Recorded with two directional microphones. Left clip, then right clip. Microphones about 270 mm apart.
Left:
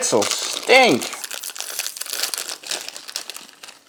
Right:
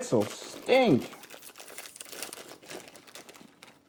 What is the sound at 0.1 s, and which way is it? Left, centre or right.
Crumpling, centre.